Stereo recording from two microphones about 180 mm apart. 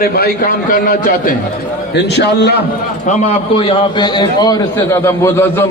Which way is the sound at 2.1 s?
70° left (ahead or behind).